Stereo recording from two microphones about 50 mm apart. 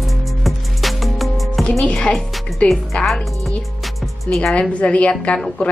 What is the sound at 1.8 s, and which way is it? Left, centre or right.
Speech, centre.